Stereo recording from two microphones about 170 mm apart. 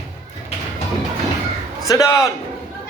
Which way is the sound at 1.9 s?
20° left (ahead or behind).